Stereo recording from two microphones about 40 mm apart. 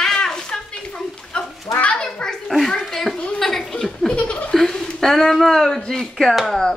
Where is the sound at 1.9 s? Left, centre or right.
Left.